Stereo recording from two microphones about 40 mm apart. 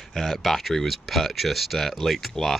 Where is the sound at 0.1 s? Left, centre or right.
Centre.